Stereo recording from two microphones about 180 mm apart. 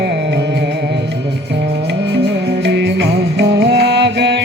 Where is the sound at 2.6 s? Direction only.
70° right (ahead or behind).